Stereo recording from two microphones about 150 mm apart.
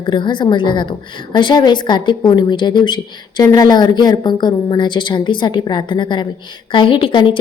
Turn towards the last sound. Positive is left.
turn(degrees=35)  # may be behind; listen again after turning